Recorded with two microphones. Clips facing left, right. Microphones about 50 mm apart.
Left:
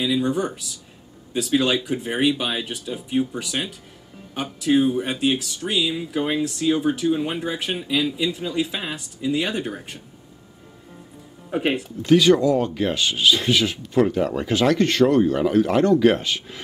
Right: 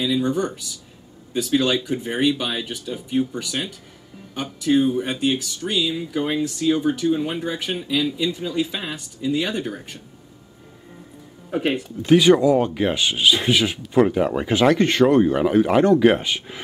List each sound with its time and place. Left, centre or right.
0.0 s speech: centre
11.5 s speech: centre
12.1 s speech: centre